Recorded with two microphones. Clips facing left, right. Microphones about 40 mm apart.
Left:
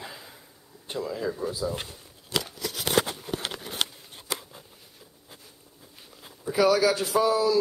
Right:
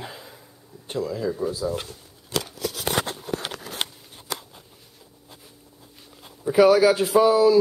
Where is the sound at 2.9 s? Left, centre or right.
Right.